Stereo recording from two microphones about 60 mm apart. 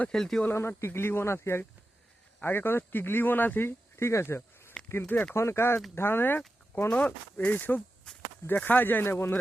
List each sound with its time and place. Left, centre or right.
0.1 s speech: centre
0.5 s speech: left
5.0 s speech: left
5.3 s speech: left
6.9 s speech: left
8.1 s walk: centre
8.4 s speech: left